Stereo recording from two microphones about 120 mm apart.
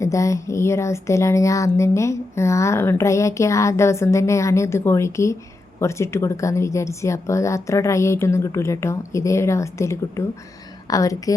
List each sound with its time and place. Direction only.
0.0 s speech: 25° left (ahead or behind)